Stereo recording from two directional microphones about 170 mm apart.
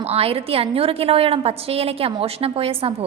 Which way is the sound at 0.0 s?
35° right (ahead or behind).